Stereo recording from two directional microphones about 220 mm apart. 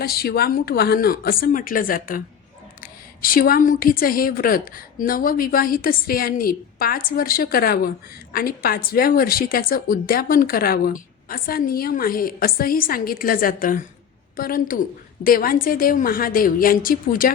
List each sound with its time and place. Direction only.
0.0 s a woman's voice: 45° left (ahead or behind)